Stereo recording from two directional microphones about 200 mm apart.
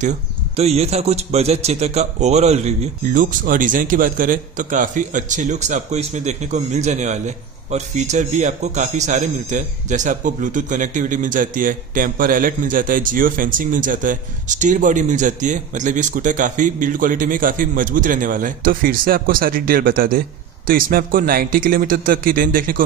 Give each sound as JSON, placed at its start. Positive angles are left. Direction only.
{"t": 0.6, "sound": "speech", "side_deg": -30}